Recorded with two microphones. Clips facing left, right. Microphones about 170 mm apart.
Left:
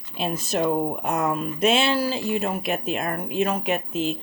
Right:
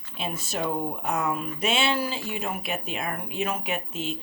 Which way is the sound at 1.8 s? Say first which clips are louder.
Left 4 dB; 35° left (ahead or behind).